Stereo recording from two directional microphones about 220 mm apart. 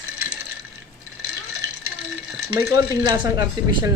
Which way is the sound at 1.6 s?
15° right (ahead or behind).